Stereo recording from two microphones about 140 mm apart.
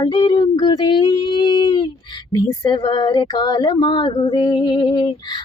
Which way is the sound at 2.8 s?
30° left (ahead or behind).